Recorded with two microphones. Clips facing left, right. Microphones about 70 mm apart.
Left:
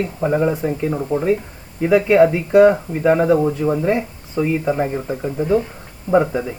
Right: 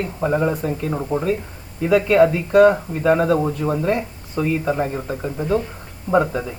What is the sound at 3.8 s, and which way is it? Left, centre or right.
Speech, centre.